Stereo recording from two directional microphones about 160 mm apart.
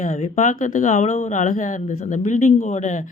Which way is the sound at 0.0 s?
45° left (ahead or behind).